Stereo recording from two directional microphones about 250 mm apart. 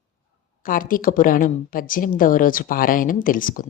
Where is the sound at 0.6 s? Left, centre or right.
Left.